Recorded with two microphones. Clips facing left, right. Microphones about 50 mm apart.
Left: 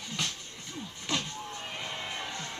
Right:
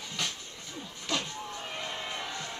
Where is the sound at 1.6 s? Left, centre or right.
Centre.